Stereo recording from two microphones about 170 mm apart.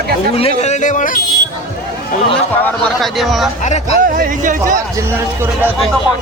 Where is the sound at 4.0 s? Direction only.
50° right (ahead or behind).